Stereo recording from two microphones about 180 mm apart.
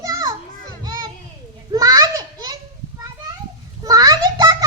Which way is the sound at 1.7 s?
20° right (ahead or behind).